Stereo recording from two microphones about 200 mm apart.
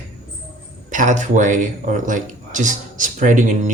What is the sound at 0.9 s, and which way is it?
Speech, 40° right (ahead or behind).